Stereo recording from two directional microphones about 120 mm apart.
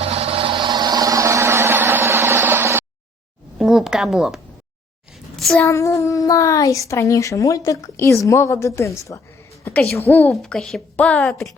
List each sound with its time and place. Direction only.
0.0 s a sound: 55° right (ahead or behind); by 2.8 s 20° right (ahead or behind)
3.6 s speech: centre (ahead or behind)
5.4 s child singing: centre (ahead or behind)
5.6 s a woman's voice: 25° left (ahead or behind)
10.3 s a woman's voice: 5° left (ahead or behind)